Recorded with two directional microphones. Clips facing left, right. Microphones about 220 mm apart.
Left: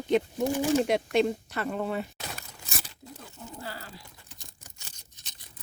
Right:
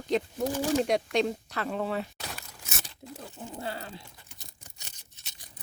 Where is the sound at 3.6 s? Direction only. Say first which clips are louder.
Right 5 dB; 25° right (ahead or behind).